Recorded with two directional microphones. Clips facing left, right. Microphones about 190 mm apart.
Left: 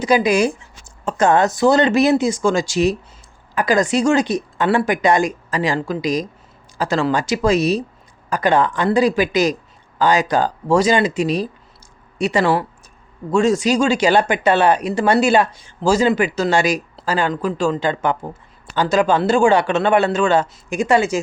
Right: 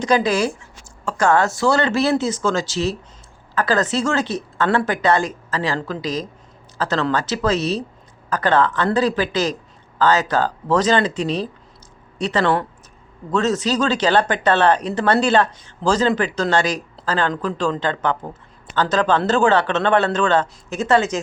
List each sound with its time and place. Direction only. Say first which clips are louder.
0.0 s speech: left 2 dB; 10° left (ahead or behind)